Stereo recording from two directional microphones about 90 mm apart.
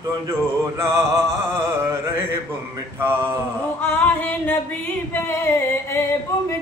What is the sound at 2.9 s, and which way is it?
Mantra, 25° right (ahead or behind).